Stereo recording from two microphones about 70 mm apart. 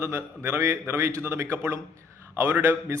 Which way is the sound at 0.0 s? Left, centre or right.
Right.